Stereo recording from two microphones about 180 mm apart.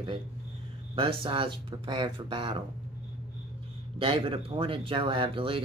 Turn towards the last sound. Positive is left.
turn(degrees=-30)  # may be behind; listen again after turning